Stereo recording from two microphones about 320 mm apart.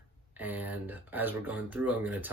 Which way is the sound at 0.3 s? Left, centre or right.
Centre.